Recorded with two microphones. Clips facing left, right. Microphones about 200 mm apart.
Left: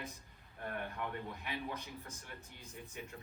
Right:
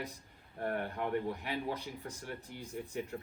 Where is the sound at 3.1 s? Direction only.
45° right (ahead or behind).